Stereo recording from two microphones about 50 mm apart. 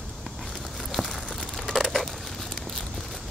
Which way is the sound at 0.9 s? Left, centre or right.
Centre.